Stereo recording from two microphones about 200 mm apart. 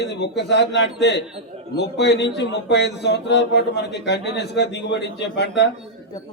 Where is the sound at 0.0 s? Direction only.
60° left (ahead or behind).